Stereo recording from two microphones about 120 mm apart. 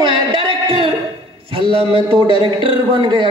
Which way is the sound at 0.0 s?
45° right (ahead or behind).